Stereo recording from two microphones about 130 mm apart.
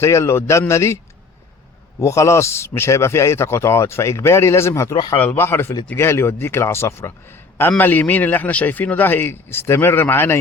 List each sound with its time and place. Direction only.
0.0 s a man's voice: 20° left (ahead or behind)
2.0 s a man's voice: 20° left (ahead or behind)